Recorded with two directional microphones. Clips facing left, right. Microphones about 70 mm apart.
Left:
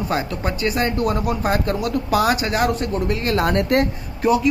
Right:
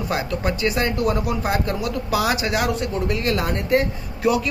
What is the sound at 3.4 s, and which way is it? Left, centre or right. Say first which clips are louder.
Speech: left 5 dB; left.